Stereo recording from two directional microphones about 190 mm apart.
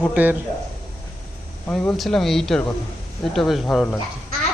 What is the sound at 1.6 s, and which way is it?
Speech, 5° left (ahead or behind).